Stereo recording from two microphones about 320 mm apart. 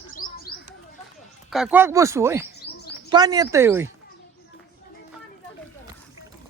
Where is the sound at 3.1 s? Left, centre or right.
Centre.